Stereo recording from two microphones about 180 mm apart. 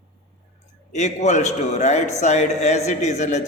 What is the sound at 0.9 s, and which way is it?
Speech, 40° left (ahead or behind).